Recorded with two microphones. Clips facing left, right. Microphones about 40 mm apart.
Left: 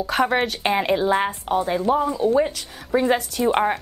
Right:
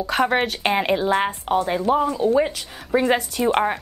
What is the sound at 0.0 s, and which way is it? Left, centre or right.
A woman's voice, centre.